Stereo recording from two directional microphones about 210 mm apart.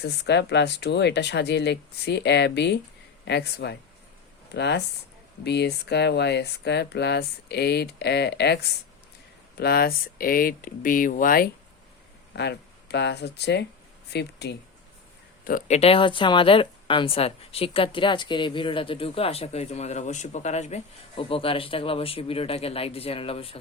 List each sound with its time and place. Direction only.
0.0 s speech: 55° left (ahead or behind)
9.6 s speech: 50° left (ahead or behind)
12.4 s speech: 55° left (ahead or behind)
15.4 s speech: 35° left (ahead or behind)